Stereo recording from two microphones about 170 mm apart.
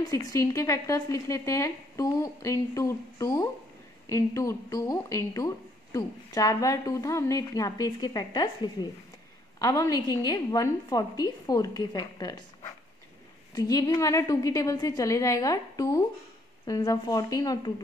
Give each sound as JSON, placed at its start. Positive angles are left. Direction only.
{"t": 0.1, "sound": "a woman's voice", "side_deg": 20}
{"t": 13.6, "sound": "a woman's voice", "side_deg": 20}